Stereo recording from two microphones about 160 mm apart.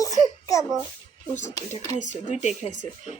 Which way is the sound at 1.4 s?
50° left (ahead or behind).